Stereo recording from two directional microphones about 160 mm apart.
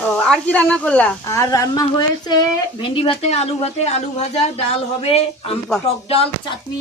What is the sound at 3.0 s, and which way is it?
Speech, 35° left (ahead or behind).